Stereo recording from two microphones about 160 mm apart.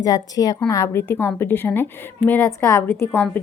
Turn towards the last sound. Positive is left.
turn(degrees=15)  # may be behind; listen again after turning